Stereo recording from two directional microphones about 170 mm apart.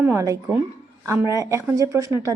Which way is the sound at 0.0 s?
15° right (ahead or behind).